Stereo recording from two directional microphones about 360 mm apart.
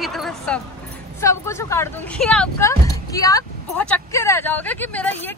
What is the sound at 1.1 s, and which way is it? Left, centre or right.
Speech, centre.